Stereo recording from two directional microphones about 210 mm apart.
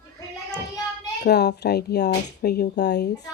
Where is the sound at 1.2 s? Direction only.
50° left (ahead or behind).